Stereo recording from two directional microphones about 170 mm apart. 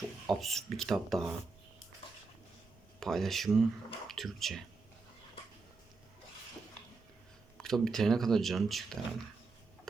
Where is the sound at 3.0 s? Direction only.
Centre (ahead or behind).